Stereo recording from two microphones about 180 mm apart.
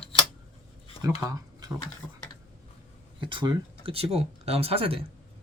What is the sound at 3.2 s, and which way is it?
Speech, 25° right (ahead or behind).